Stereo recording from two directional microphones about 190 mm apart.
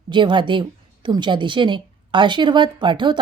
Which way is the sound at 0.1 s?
25° right (ahead or behind).